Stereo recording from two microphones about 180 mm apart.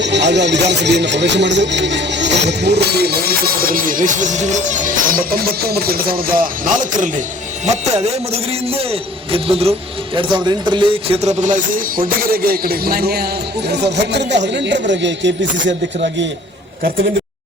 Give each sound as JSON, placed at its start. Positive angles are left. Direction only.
{"t": 0.0, "sound": "speech", "side_deg": -75}
{"t": 7.6, "sound": "speech", "side_deg": -40}
{"t": 13.7, "sound": "speech", "side_deg": -70}